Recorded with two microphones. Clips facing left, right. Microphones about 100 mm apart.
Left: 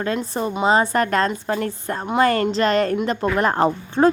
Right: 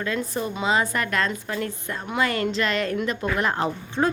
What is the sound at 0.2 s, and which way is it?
Speech, 35° left (ahead or behind).